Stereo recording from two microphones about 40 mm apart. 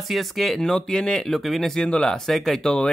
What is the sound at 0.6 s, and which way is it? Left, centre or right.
Speech, centre.